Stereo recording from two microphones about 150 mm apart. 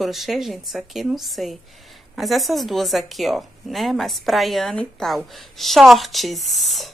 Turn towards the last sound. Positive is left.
turn(degrees=0)  # may be behind; listen again after turning